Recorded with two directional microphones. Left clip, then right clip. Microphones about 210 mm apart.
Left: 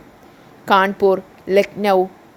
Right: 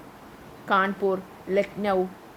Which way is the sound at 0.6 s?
35° left (ahead or behind).